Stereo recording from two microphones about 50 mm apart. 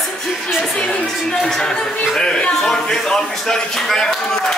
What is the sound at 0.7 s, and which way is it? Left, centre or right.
Speech, left.